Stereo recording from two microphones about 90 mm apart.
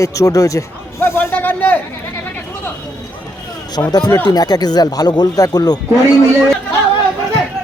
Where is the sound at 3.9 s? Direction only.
50° left (ahead or behind).